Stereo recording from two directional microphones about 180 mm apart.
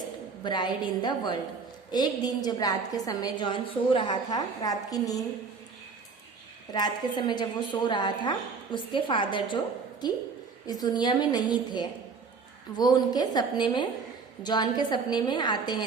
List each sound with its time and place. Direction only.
0.4 s a woman's voice: 25° left (ahead or behind)
6.7 s a woman's voice: 25° left (ahead or behind)